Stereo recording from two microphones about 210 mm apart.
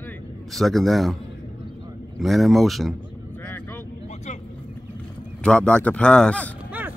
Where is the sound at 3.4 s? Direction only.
10° left (ahead or behind).